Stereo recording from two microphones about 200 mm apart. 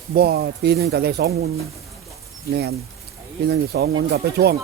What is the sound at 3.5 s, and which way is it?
Speech, 55° right (ahead or behind).